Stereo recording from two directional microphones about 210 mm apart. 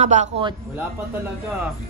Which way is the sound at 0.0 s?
35° right (ahead or behind).